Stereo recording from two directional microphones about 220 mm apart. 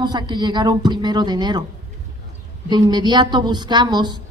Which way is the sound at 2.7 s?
20° right (ahead or behind).